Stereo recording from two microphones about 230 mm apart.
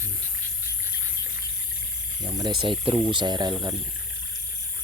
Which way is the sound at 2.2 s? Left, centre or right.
Centre.